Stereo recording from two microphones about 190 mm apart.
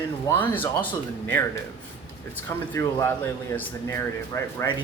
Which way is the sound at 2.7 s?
15° left (ahead or behind).